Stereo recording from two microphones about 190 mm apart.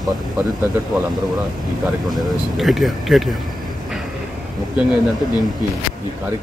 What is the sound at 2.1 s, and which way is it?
Speech, centre (ahead or behind).